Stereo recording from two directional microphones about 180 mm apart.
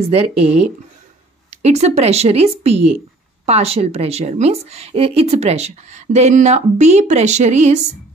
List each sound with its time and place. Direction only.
0.1 s a woman's voice: 35° right (ahead or behind)